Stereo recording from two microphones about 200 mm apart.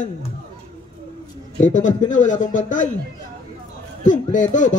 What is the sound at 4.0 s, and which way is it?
Speech, 40° left (ahead or behind).